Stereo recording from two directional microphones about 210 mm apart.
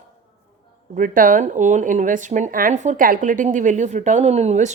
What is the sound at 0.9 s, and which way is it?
A woman's voice, 40° right (ahead or behind).